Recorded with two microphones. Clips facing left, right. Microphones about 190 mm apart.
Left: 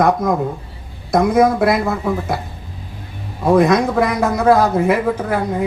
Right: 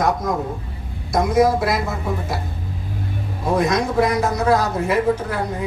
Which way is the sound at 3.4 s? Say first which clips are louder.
Left 6 dB; 55° left (ahead or behind).